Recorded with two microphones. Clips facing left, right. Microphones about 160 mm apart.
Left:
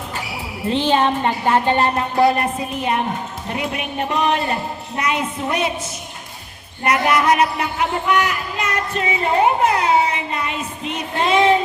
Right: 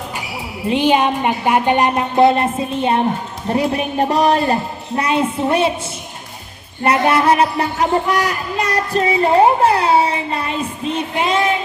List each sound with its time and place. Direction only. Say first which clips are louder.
0.7 s a woman's voice: right 2 dB; 15° right (ahead or behind); by 5.7 s 30° right (ahead or behind)
6.8 s speech: right 3 dB; 30° right (ahead or behind)